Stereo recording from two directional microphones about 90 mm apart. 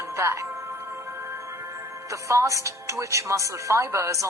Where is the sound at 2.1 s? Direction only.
35° right (ahead or behind).